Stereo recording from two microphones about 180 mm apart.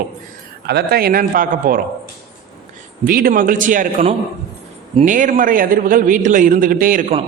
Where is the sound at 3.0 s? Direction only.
55° right (ahead or behind).